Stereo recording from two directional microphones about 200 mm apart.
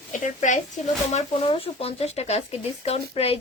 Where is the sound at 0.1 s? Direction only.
40° left (ahead or behind).